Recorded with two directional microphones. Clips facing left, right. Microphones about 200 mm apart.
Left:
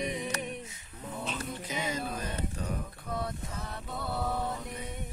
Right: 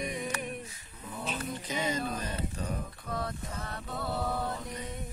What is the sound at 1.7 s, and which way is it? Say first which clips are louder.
Music: right 2 dB; 5° left (ahead or behind).